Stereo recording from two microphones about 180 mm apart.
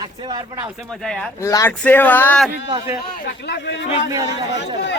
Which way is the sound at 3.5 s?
70° left (ahead or behind).